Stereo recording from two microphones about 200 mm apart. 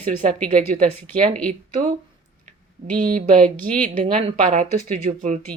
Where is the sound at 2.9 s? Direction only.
40° right (ahead or behind).